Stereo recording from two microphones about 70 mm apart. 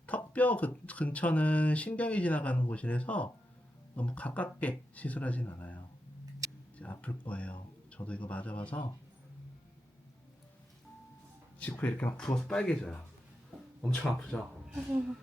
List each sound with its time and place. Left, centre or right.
0.0 s speech: left
7.0 s speech: left
11.6 s speech: left
12.1 s speech: centre
14.9 s speech: centre